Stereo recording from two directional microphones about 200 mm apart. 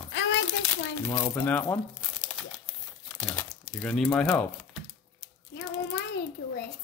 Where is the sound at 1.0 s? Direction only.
15° left (ahead or behind).